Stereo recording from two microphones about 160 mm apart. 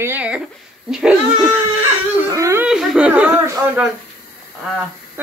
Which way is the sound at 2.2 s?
20° right (ahead or behind).